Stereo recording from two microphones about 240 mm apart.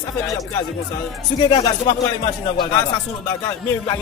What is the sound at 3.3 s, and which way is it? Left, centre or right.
Music, centre.